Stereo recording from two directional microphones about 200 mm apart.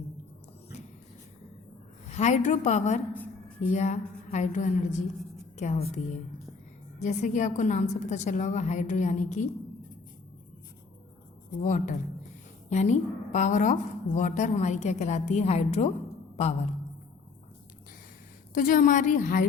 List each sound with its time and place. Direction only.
2.0 s a woman's voice: 35° left (ahead or behind)
7.0 s a woman's voice: 35° left (ahead or behind)
11.6 s a woman's voice: 40° left (ahead or behind)
18.5 s a woman's voice: 40° left (ahead or behind)